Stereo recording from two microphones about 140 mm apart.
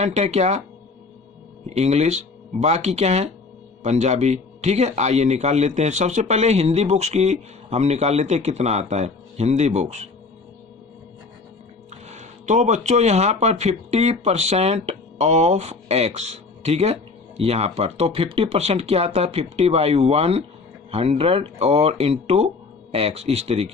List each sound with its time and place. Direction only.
0.0 s speech: 55° right (ahead or behind)
1.7 s speech: 50° right (ahead or behind)
12.0 s speech: 55° right (ahead or behind)